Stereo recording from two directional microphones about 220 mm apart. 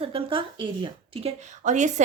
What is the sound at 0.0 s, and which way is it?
A woman's voice, 25° right (ahead or behind).